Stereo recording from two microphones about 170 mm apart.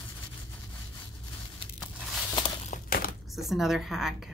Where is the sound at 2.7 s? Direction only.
60° left (ahead or behind).